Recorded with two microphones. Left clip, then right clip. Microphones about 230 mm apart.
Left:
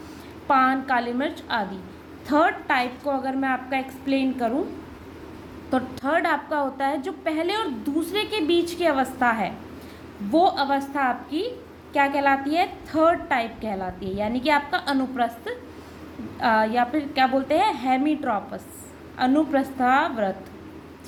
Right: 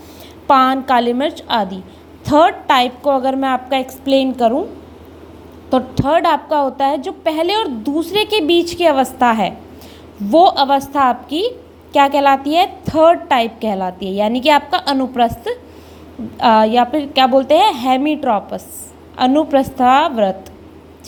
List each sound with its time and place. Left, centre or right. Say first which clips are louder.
0.4 s a woman's voice: right 8 dB; right
5.7 s a woman's voice: right 9 dB; right